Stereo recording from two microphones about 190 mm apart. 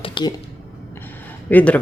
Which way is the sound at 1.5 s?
10° left (ahead or behind).